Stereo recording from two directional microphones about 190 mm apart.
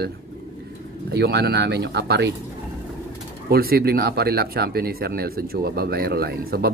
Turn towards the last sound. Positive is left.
turn(degrees=-55)  # may be behind; listen again after turning